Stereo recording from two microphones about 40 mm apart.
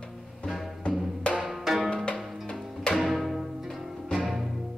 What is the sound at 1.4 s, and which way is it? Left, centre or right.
Music, centre.